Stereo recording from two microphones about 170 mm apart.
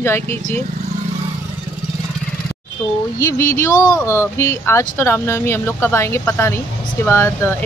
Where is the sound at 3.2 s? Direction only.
15° left (ahead or behind).